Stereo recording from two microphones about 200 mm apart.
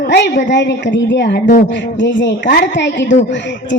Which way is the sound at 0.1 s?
60° left (ahead or behind).